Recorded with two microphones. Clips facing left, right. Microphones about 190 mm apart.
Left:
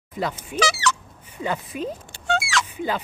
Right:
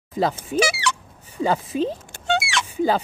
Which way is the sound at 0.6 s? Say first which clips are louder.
Right 1 dB; 10° right (ahead or behind).